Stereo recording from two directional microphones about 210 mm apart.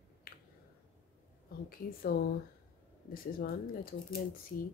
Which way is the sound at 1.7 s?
45° left (ahead or behind).